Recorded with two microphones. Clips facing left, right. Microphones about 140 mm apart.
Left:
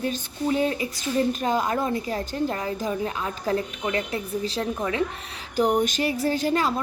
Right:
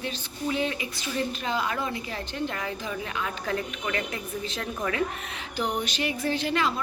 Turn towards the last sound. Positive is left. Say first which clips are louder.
# left 3 dB
turn(degrees=40)  # may be behind; listen again after turning